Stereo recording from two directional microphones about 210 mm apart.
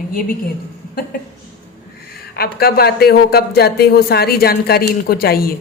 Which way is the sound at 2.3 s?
45° left (ahead or behind).